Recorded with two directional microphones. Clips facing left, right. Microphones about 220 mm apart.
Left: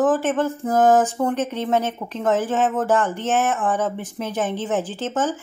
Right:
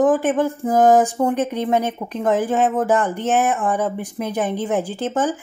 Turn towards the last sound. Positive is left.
turn(degrees=-15)  # may be behind; listen again after turning